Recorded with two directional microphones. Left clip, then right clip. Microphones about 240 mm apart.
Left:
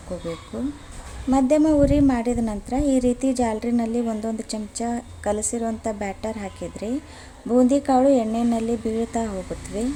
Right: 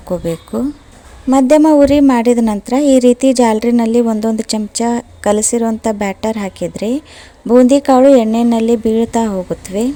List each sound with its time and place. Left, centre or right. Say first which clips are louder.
1.3 s a woman's voice: right 10 dB; right